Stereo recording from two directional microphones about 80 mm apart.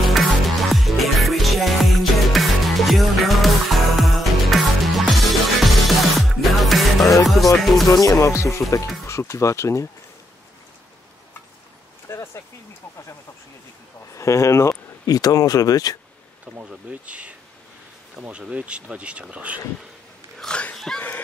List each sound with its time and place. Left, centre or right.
0.1 s music: centre
7.9 s speech: left
12.1 s a sound: left
14.1 s speech: left
15.0 s speech: left
16.6 s a sound: centre
18.4 s speech: centre
20.3 s speech: centre